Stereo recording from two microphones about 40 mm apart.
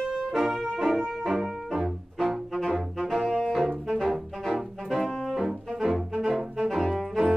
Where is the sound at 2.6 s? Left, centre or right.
Centre.